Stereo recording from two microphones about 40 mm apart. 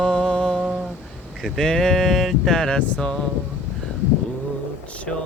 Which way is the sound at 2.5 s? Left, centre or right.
Centre.